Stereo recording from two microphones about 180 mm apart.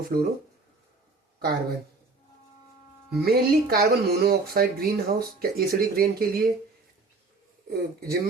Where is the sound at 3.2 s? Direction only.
60° right (ahead or behind).